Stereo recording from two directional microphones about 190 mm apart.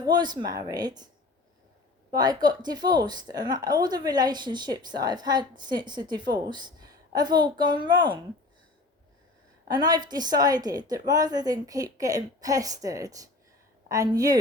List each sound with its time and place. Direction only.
0.0 s a woman's voice: 20° right (ahead or behind)
2.1 s a woman's voice: 20° right (ahead or behind)
9.6 s a woman's voice: 20° right (ahead or behind)